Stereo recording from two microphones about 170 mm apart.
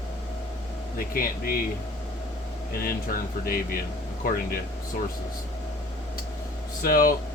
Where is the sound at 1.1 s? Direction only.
60° left (ahead or behind).